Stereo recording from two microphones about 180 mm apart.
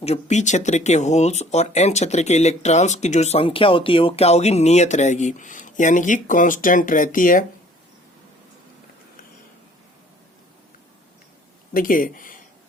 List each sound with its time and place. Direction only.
0.0 s speech: 35° left (ahead or behind)
11.7 s speech: 50° left (ahead or behind)